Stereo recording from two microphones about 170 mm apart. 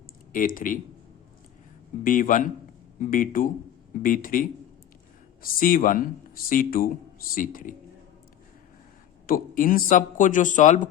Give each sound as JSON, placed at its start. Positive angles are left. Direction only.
{"t": 0.3, "sound": "speech", "side_deg": 55}
{"t": 2.0, "sound": "speech", "side_deg": 50}
{"t": 9.2, "sound": "speech", "side_deg": 55}